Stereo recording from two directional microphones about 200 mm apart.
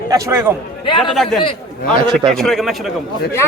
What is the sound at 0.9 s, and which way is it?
Speech, 25° left (ahead or behind).